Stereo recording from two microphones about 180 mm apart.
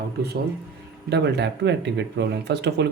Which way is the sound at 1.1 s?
70° right (ahead or behind).